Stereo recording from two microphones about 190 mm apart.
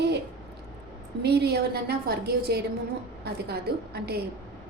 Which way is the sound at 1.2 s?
60° right (ahead or behind).